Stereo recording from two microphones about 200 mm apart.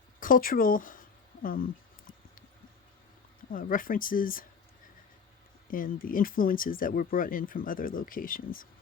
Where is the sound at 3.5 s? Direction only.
45° left (ahead or behind).